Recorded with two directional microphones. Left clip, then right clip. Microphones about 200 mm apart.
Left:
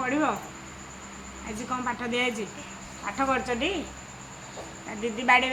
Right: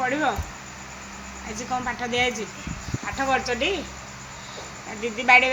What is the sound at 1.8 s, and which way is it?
Speech, centre (ahead or behind).